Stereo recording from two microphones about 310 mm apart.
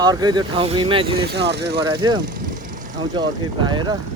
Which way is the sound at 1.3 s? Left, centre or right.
Right.